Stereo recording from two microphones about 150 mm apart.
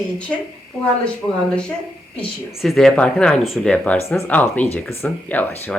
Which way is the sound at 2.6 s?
Centre (ahead or behind).